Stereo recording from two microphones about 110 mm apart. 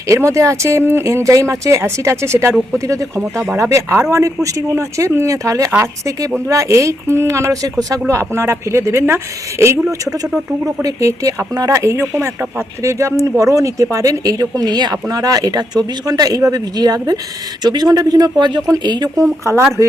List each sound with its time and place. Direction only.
0.1 s speech: 30° right (ahead or behind)
10.3 s speech: 5° right (ahead or behind)
10.8 s speech: 30° right (ahead or behind)